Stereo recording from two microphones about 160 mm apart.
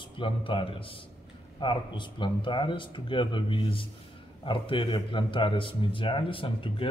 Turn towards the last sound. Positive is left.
turn(degrees=35)  # may be behind; listen again after turning